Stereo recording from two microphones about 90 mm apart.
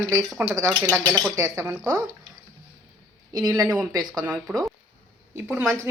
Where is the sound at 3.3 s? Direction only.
50° right (ahead or behind).